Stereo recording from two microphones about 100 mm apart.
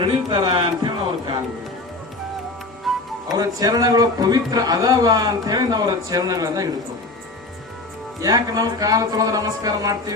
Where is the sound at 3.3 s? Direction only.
40° right (ahead or behind).